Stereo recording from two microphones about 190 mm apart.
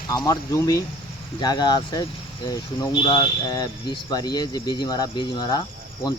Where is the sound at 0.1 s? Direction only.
20° left (ahead or behind).